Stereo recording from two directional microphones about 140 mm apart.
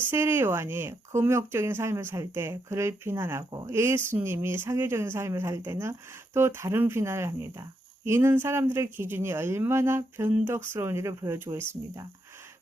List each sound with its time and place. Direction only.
0.1 s speech: 15° right (ahead or behind)